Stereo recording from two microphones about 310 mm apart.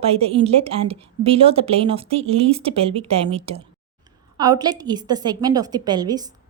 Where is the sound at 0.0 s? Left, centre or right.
Centre.